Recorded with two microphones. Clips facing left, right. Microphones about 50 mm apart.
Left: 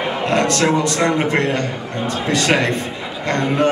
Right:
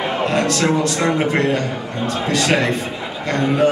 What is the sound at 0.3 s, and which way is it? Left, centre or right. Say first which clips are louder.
A man's voice: left 3 dB; centre.